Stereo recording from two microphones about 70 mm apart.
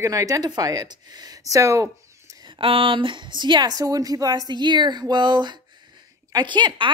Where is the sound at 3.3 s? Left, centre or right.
Right.